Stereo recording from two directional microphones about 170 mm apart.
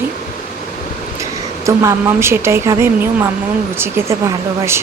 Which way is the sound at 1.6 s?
15° right (ahead or behind).